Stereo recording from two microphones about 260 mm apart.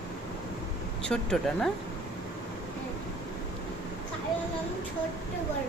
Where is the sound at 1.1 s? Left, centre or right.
Centre.